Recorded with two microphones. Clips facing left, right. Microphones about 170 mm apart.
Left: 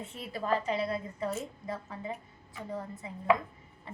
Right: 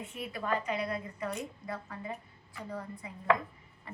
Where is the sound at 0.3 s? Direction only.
30° left (ahead or behind).